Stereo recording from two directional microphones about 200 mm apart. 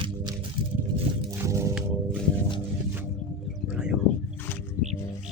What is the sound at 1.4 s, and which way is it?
Music, 15° right (ahead or behind).